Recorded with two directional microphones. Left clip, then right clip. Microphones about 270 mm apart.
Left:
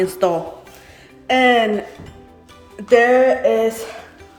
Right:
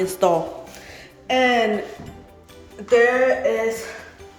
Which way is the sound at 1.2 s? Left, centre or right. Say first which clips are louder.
Left 4 dB; centre.